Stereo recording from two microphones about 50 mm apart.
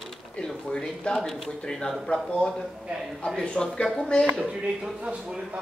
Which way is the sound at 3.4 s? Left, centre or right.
Centre.